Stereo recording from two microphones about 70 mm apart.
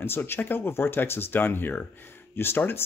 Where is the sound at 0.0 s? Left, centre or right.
Left.